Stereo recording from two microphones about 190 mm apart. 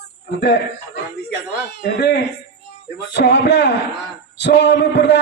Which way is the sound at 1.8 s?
60° left (ahead or behind).